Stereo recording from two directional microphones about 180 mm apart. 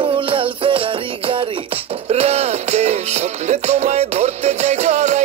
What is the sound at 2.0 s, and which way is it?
Music, 35° right (ahead or behind).